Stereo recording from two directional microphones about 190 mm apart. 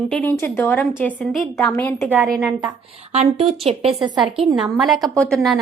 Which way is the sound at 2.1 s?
Centre (ahead or behind).